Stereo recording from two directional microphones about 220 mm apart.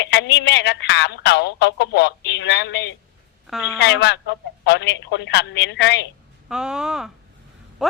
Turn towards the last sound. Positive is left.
turn(degrees=0)  # may be behind; listen again after turning